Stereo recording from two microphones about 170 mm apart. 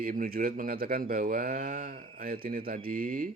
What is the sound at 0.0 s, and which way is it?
Speech, 55° right (ahead or behind).